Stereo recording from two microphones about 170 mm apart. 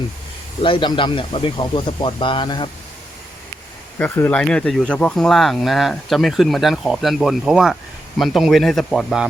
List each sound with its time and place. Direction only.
0.6 s speech: 30° left (ahead or behind)
3.9 s speech: 10° left (ahead or behind)